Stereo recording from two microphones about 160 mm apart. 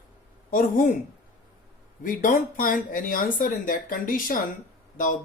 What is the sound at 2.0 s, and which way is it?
A man's voice, 55° left (ahead or behind).